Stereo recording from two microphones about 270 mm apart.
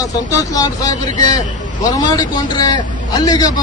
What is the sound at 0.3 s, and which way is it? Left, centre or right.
A man's voice, centre.